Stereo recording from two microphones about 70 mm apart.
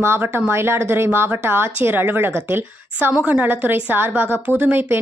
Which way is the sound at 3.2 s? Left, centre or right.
Right.